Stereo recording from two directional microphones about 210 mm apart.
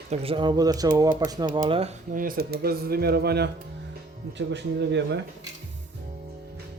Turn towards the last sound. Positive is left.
turn(degrees=-55)  # may be behind; listen again after turning